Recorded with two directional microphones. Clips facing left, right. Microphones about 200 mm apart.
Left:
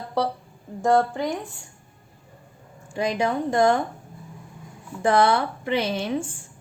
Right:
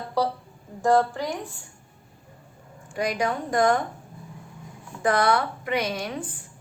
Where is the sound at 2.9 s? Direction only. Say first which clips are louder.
Left 2 dB; 25° left (ahead or behind).